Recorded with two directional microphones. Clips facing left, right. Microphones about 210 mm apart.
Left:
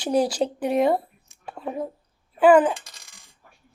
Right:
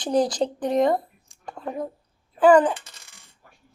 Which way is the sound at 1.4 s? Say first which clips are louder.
Left 1 dB; 5° left (ahead or behind).